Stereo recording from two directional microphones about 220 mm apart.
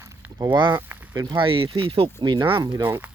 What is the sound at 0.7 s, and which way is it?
Speech, 10° right (ahead or behind).